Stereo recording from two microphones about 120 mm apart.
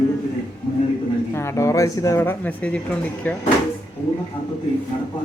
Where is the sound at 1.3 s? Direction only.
20° left (ahead or behind).